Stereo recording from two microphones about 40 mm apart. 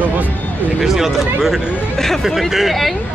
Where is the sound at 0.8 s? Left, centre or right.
Centre.